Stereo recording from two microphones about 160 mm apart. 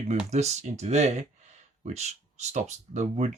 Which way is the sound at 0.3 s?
45° right (ahead or behind).